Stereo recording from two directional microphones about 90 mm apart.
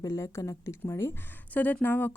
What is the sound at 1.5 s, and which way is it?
Speech, 20° left (ahead or behind).